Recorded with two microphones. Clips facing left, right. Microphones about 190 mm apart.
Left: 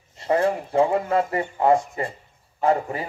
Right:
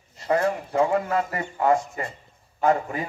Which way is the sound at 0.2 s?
30° left (ahead or behind).